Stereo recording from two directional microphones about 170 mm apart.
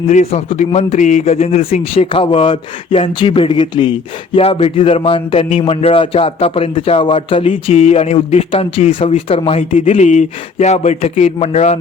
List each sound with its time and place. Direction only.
0.1 s speech: 40° left (ahead or behind)